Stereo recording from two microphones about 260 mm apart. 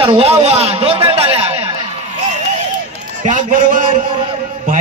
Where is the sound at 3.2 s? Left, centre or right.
Right.